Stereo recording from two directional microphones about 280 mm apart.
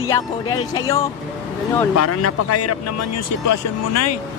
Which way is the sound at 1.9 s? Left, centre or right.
Left.